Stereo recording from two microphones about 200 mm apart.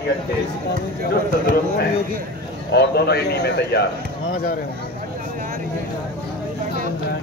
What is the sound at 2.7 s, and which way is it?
A man's voice, 55° left (ahead or behind).